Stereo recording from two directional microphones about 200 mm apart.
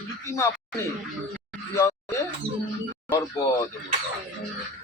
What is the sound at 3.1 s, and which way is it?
Speech, 15° left (ahead or behind).